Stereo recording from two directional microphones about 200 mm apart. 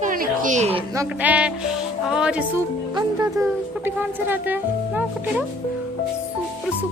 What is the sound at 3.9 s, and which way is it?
Speech, 10° right (ahead or behind).